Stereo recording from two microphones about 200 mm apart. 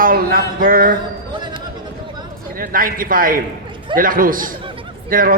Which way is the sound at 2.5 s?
45° right (ahead or behind).